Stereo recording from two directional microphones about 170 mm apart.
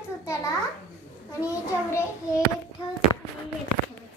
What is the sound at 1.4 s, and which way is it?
Child singing, 15° left (ahead or behind).